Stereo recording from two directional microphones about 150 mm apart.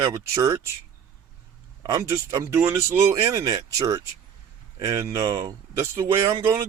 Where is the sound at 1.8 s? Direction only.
20° right (ahead or behind).